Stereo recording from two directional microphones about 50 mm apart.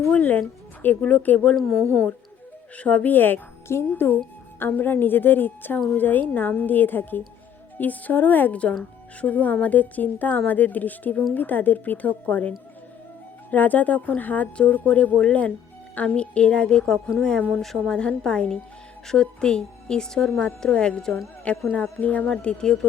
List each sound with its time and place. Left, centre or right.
0.1 s speech: left
1.5 s speech: centre
2.7 s a woman's voice: left
3.7 s a woman's voice: left
14.6 s speech: left; by 17.7 s centre
17.8 s a woman's voice: centre
22.3 s speech: centre